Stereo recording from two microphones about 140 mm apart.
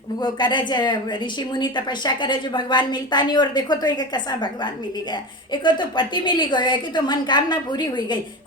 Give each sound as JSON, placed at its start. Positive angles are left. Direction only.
{"t": 0.2, "sound": "a woman's voice", "side_deg": 35}